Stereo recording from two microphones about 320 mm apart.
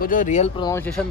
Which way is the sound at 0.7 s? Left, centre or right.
Centre.